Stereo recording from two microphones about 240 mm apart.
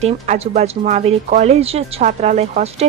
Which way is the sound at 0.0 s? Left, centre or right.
Right.